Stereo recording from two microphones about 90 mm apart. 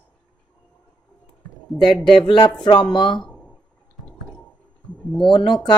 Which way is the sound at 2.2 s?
50° left (ahead or behind).